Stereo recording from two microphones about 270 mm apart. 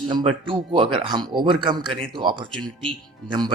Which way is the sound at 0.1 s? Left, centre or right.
Centre.